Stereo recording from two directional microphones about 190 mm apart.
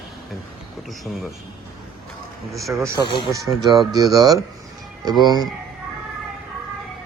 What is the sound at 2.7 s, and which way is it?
Speech, 15° right (ahead or behind).